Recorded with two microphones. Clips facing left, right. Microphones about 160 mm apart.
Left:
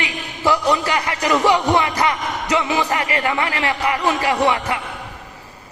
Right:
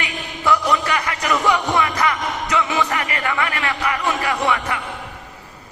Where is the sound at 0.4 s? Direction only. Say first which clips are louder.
Left 1 dB; 30° left (ahead or behind).